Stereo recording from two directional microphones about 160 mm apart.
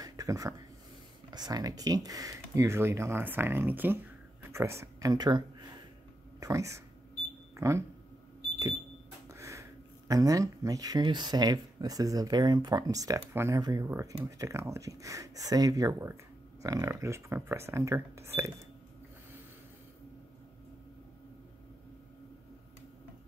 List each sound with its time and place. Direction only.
0.0 s a sound: 20° right (ahead or behind)
1.3 s speech: 25° right (ahead or behind)
9.3 s speech: 20° right (ahead or behind)